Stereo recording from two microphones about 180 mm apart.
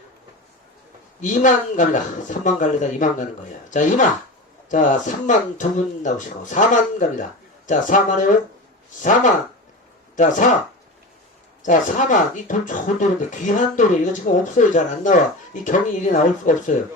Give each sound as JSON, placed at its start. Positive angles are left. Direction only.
{"t": 1.2, "sound": "speech", "side_deg": 45}
{"t": 11.6, "sound": "speech", "side_deg": 45}